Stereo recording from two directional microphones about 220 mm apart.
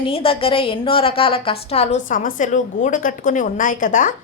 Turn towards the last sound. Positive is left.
turn(degrees=35)  # may be behind; listen again after turning